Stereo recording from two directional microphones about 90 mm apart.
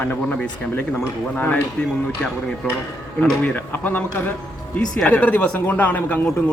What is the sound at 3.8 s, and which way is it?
Speech, 20° left (ahead or behind).